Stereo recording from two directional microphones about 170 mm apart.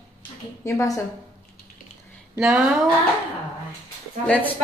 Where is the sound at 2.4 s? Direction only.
5° right (ahead or behind).